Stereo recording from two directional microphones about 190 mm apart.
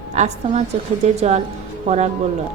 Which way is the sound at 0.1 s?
35° right (ahead or behind).